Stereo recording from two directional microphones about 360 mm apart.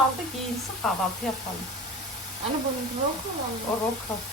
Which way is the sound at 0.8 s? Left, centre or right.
Centre.